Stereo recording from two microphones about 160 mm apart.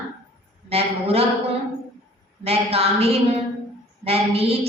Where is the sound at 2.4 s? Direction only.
40° right (ahead or behind).